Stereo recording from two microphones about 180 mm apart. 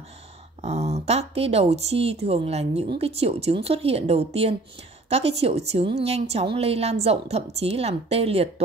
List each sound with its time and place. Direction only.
0.6 s a woman's voice: 40° right (ahead or behind)